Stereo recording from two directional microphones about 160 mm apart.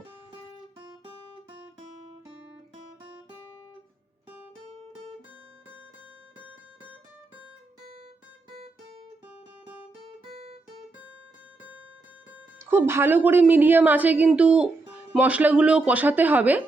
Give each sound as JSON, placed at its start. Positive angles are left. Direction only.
{"t": 8.4, "sound": "guitar", "side_deg": -35}
{"t": 10.2, "sound": "guitar", "side_deg": -40}
{"t": 12.7, "sound": "a woman's voice", "side_deg": -15}